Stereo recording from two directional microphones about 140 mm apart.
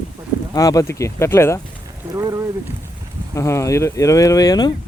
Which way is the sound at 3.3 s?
20° left (ahead or behind).